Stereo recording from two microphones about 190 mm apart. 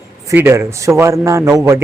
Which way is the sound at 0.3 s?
15° right (ahead or behind).